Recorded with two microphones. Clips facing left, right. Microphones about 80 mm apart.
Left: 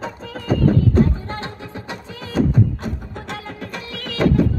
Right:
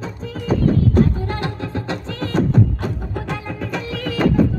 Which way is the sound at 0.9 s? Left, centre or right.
Left.